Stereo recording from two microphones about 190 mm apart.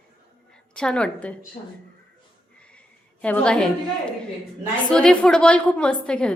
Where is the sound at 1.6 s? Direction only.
40° left (ahead or behind).